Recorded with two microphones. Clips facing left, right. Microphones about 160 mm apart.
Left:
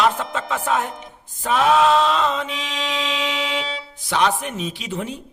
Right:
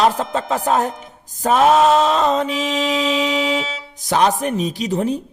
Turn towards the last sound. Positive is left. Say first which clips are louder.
# right 8 dB
turn(degrees=-40)  # may be behind; listen again after turning